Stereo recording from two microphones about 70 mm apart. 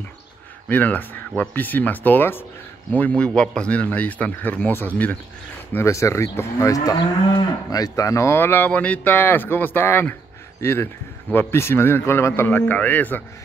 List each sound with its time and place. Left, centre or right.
0.7 s speech: left
5.9 s speech: left
6.7 s moo: left
10.6 s speech: left
11.3 s moo: left